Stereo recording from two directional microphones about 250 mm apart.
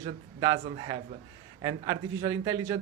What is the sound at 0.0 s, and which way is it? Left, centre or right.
Speech, centre.